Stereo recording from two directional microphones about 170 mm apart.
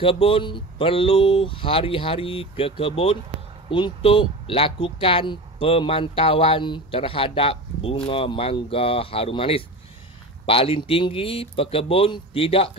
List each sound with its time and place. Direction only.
0.0 s speech: 30° left (ahead or behind)